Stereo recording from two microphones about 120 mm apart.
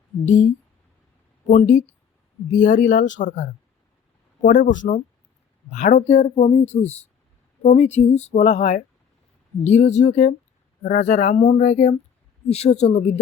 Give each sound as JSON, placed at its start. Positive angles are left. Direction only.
{"t": 0.3, "sound": "speech", "side_deg": 75}
{"t": 1.5, "sound": "speech", "side_deg": 85}
{"t": 4.5, "sound": "speech", "side_deg": 90}
{"t": 11.5, "sound": "speech", "side_deg": 65}